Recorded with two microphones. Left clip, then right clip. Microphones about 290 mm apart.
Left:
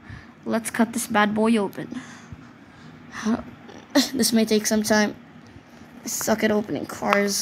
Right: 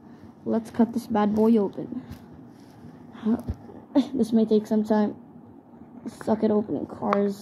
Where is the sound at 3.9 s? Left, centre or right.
Left.